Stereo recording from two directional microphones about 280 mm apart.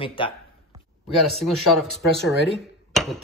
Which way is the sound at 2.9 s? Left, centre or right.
Centre.